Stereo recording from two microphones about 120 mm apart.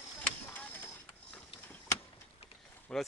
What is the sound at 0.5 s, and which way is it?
Printer, 15° left (ahead or behind).